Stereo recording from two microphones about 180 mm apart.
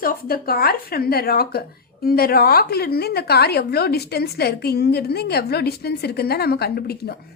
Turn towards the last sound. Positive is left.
turn(degrees=60)  # may be behind; listen again after turning